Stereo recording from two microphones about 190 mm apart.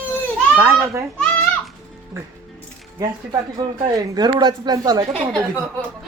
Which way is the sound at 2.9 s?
20° right (ahead or behind).